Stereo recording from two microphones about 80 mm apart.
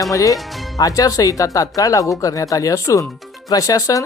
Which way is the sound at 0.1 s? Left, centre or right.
Left.